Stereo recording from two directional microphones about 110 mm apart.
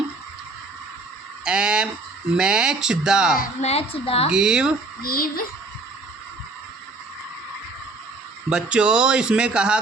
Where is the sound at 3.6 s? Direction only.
70° left (ahead or behind).